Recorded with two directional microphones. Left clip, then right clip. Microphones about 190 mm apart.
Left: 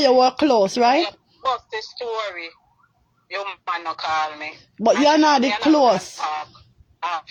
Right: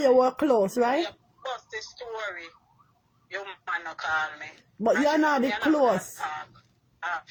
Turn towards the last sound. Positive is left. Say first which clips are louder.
# left 6 dB
turn(degrees=25)  # may be behind; listen again after turning